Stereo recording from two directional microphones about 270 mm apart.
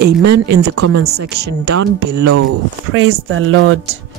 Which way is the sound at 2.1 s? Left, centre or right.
Right.